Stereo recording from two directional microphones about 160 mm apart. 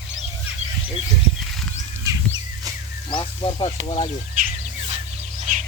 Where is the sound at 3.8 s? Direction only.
35° left (ahead or behind).